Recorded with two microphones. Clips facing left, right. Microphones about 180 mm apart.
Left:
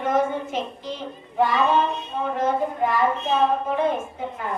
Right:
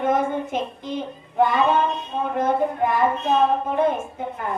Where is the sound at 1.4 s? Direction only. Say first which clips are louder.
Right 1 dB; 55° right (ahead or behind).